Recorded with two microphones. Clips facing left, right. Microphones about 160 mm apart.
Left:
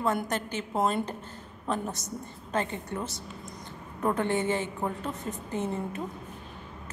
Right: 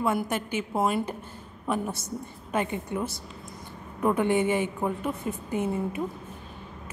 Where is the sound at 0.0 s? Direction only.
10° right (ahead or behind).